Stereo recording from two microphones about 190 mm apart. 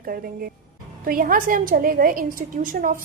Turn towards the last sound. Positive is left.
turn(degrees=-45)  # may be behind; listen again after turning